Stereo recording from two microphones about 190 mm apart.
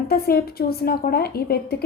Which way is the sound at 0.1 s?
55° left (ahead or behind).